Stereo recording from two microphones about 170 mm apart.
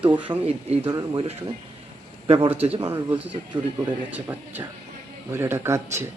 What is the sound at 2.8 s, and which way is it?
Speech, 15° right (ahead or behind).